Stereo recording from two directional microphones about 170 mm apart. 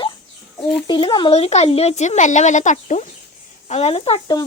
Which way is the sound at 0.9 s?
30° left (ahead or behind).